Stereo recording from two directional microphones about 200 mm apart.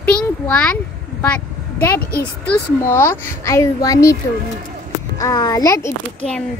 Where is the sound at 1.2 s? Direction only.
10° left (ahead or behind).